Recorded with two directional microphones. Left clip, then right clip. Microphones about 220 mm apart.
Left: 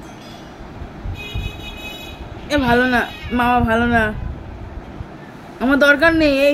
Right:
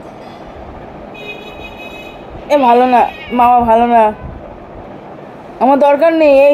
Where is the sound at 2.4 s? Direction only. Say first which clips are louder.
Right 8 dB; 25° left (ahead or behind).